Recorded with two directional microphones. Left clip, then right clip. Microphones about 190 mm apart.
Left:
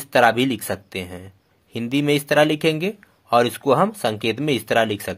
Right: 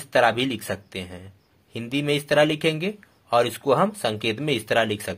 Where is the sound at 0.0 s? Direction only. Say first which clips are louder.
Left 4 dB; 30° left (ahead or behind).